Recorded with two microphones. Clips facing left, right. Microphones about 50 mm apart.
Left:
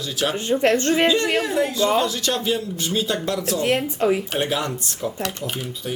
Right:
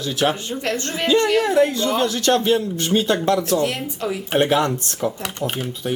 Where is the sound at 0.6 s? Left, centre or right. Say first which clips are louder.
Left 7 dB; left.